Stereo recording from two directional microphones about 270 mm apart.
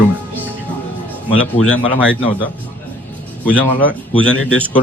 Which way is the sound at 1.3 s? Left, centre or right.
Left.